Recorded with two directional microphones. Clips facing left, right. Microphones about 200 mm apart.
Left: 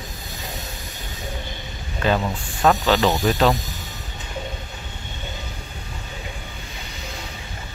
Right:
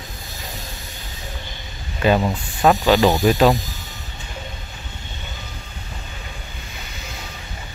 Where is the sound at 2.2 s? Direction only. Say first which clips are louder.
Right 2 dB; 20° right (ahead or behind).